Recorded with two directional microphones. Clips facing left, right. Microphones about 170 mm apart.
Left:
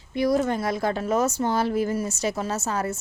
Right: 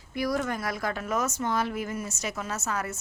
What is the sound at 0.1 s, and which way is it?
A woman's voice, 25° left (ahead or behind).